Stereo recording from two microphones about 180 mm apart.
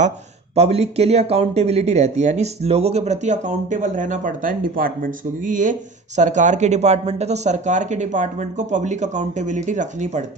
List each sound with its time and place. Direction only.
0.5 s speech: 35° right (ahead or behind)